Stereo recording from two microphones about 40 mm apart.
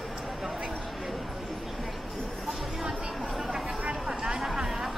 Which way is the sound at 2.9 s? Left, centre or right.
Centre.